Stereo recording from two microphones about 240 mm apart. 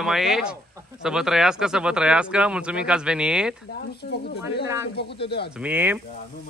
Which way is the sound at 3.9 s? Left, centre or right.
Left.